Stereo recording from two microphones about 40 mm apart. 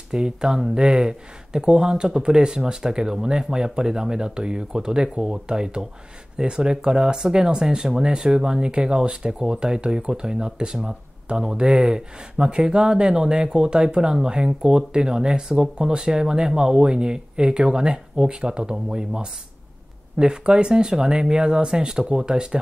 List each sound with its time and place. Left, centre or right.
0.1 s speech: centre